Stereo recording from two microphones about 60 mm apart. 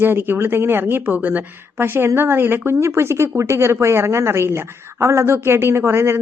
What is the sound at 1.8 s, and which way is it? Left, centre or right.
Speech, right.